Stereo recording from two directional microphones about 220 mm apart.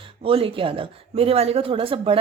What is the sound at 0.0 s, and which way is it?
A woman's voice, 25° right (ahead or behind).